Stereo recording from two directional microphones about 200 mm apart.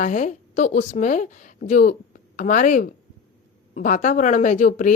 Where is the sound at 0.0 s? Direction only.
40° left (ahead or behind).